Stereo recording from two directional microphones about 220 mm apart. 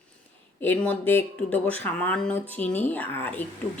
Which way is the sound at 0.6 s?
10° left (ahead or behind).